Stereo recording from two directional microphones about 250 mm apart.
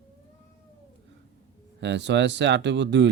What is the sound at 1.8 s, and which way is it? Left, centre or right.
Speech, right.